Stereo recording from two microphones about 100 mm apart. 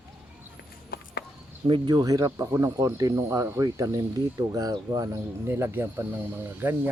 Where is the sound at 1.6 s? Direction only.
50° right (ahead or behind).